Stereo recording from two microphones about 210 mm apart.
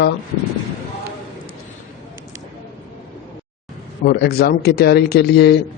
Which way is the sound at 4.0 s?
45° left (ahead or behind).